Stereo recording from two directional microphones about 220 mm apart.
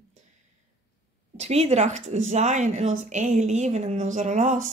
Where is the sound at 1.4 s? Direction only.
30° right (ahead or behind).